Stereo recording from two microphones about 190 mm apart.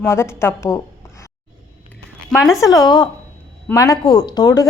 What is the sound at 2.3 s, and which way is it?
Speech, centre (ahead or behind).